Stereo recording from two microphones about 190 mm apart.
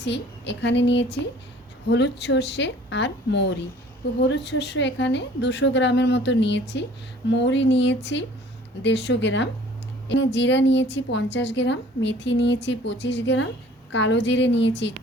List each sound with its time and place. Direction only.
0.0 s a woman's voice: 70° left (ahead or behind)